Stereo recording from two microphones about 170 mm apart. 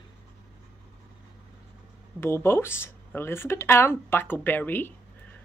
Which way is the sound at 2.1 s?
15° left (ahead or behind).